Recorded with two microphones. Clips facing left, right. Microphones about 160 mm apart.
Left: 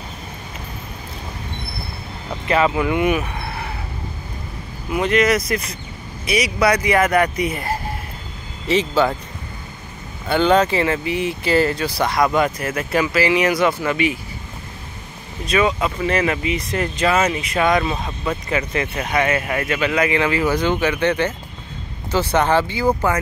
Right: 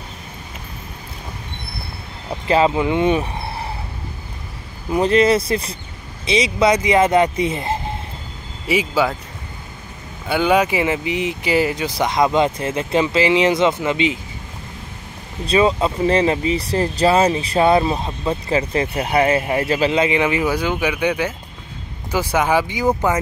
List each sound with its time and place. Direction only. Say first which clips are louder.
2.4 s speech: right 2 dB; 30° right (ahead or behind)
4.9 s speech: right 3 dB; 30° right (ahead or behind)
8.6 s speech: left 1 dB; 10° right (ahead or behind)
10.2 s speech: left 1 dB; 10° right (ahead or behind)
15.4 s speech: right 3 dB; 30° right (ahead or behind)